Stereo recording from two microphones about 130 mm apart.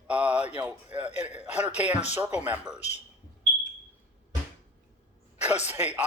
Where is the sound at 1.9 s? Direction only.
60° left (ahead or behind).